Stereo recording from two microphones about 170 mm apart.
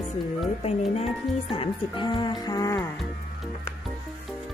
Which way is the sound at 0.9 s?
35° left (ahead or behind).